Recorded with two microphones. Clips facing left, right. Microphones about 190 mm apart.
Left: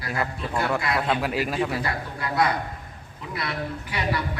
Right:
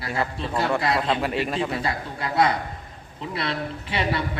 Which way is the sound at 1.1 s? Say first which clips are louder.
Right 1 dB; centre (ahead or behind).